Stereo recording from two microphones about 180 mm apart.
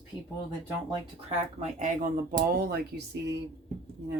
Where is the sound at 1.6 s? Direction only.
45° right (ahead or behind); by 3.4 s 65° right (ahead or behind).